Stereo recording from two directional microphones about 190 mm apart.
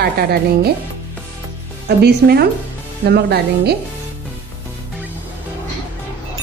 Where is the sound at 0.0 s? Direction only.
55° right (ahead or behind).